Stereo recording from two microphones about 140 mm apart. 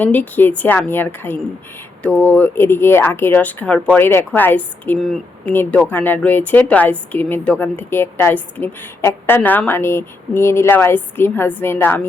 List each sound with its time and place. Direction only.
0.0 s a woman's voice: 10° left (ahead or behind)